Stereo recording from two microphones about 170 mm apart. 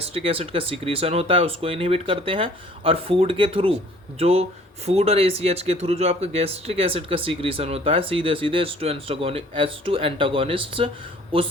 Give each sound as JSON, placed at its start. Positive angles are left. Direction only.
{"t": 0.0, "sound": "speech", "side_deg": -35}